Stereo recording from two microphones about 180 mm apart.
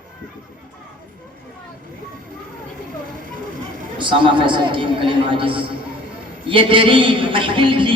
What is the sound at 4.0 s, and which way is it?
A man's voice, 25° right (ahead or behind).